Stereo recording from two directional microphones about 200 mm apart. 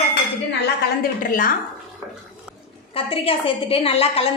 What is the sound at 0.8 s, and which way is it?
Speech, 45° left (ahead or behind).